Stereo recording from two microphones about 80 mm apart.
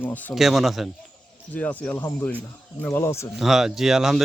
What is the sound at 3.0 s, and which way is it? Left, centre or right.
Speech, left.